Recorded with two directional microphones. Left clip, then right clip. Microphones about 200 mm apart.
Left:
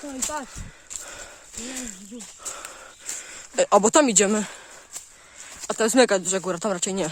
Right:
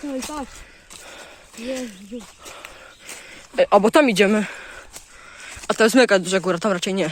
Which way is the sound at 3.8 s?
15° left (ahead or behind).